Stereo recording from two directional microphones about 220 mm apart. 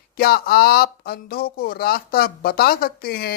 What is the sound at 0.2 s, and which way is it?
Speech, 45° left (ahead or behind).